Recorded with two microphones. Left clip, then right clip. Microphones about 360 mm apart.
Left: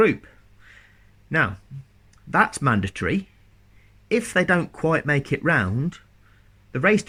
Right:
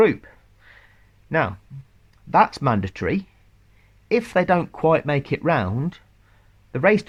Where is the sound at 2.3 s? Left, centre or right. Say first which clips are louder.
Right 3 dB; centre.